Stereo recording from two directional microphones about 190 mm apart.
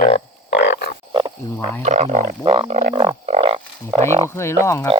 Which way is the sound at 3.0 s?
30° right (ahead or behind).